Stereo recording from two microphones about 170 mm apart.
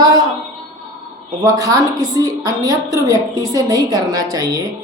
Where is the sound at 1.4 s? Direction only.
20° right (ahead or behind).